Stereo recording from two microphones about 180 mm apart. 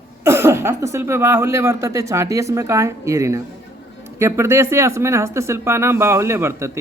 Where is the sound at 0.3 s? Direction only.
15° right (ahead or behind).